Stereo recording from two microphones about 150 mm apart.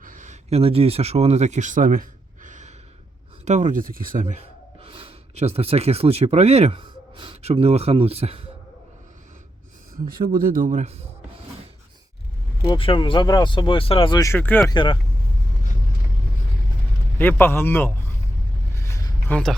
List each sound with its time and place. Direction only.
0.0 s a sound: 60° right (ahead or behind)
3.4 s speech: 55° right (ahead or behind)
4.4 s gasp: 40° right (ahead or behind)
7.4 s speech: 40° right (ahead or behind)
10.1 s a man's voice: 75° right (ahead or behind); by 10.9 s 55° right (ahead or behind)
12.6 s speech: 35° left (ahead or behind)
14.3 s a man's voice: 10° left (ahead or behind)
14.7 s speech: 30° left (ahead or behind)
17.2 s a man's voice: 15° left (ahead or behind)
18.8 s vehicle: 20° left (ahead or behind)
19.3 s speech: 5° left (ahead or behind)